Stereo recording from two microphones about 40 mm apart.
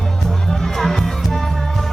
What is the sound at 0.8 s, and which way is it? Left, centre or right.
Music, centre.